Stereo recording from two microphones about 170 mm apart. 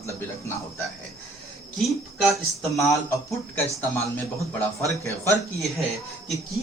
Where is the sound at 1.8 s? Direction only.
Centre (ahead or behind).